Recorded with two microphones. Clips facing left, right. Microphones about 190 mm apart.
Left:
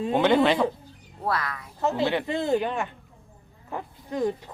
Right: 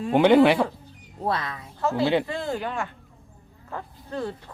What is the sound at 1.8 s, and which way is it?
Speech, 20° left (ahead or behind).